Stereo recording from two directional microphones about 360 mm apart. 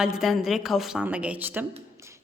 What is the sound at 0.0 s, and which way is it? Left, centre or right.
A woman's voice, centre.